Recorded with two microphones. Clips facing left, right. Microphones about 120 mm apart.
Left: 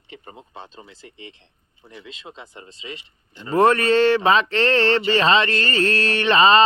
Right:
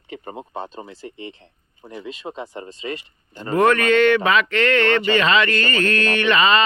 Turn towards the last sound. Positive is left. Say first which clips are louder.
# left 2 dB
turn(degrees=30)  # may be behind; listen again after turning